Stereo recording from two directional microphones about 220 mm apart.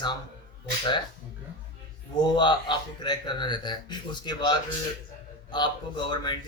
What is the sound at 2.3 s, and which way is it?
Speech, 20° left (ahead or behind).